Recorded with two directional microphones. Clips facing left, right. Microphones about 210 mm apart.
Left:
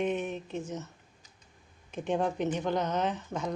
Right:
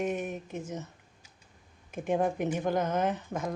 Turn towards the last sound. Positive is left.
turn(degrees=-10)  # may be behind; listen again after turning